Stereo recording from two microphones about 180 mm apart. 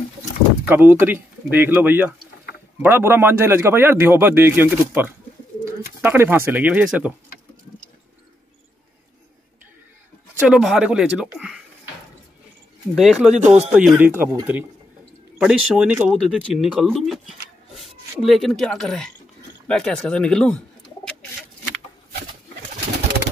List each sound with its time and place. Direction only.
0.7 s a man's voice: 10° right (ahead or behind)
10.5 s speech: centre (ahead or behind)
12.9 s speech: centre (ahead or behind)
13.3 s speech: 40° right (ahead or behind)
13.7 s a man's voice: 5° right (ahead or behind)